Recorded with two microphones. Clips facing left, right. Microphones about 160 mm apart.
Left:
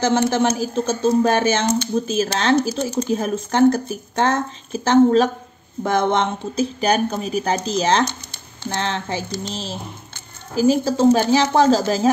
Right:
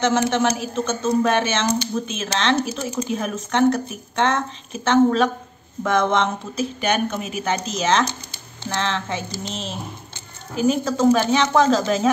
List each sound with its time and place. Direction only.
0.0 s speech: 30° left (ahead or behind)